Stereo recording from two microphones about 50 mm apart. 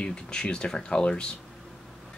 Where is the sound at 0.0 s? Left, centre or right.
Centre.